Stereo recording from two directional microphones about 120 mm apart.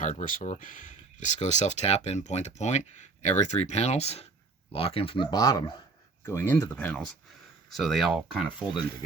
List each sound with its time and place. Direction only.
0.0 s speech: 90° left; by 5.7 s 35° left (ahead or behind)
6.2 s speech: 20° left (ahead or behind)
7.7 s speech: centre (ahead or behind)